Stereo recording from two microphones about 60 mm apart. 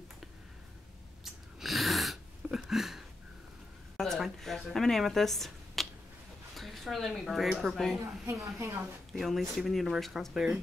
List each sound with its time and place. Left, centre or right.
1.2 s a sound: centre
3.9 s a sound: centre
6.5 s speech: centre
8.0 s a woman's voice: right
8.5 s a woman's voice: right
9.1 s speech: centre